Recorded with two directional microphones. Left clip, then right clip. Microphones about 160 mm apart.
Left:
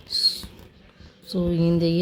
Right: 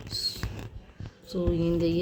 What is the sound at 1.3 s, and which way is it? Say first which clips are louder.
Speech: left 4 dB; 60° left (ahead or behind).